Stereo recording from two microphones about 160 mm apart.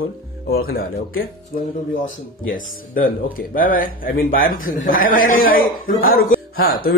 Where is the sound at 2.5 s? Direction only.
65° left (ahead or behind).